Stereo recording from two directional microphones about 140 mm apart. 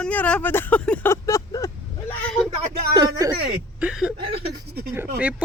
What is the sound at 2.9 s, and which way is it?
Speech, 25° right (ahead or behind).